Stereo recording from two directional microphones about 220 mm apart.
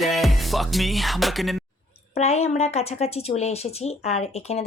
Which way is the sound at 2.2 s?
30° left (ahead or behind).